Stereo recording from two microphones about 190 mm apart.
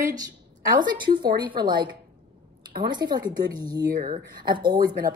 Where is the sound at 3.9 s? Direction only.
50° right (ahead or behind).